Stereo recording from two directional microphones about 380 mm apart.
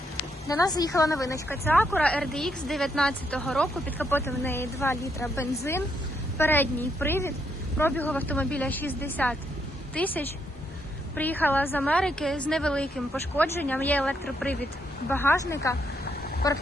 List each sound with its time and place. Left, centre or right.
0.4 s a woman's voice: centre
16.4 s quack: centre